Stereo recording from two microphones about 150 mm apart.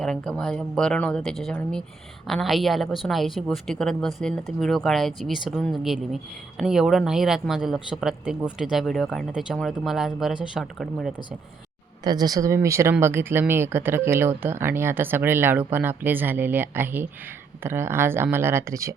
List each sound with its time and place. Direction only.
0.0 s speech: 5° left (ahead or behind)
12.0 s speech: 25° right (ahead or behind)